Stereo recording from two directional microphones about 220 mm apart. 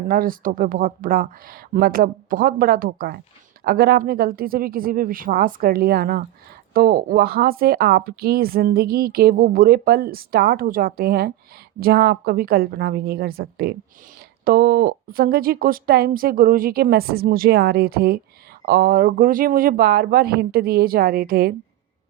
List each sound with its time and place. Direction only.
0.1 s a woman's voice: 40° right (ahead or behind)